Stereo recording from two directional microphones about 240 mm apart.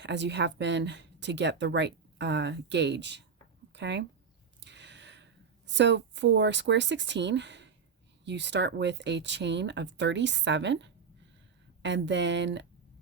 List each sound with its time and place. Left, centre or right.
0.0 s speech: right
3.7 s a sound: right
5.6 s speech: right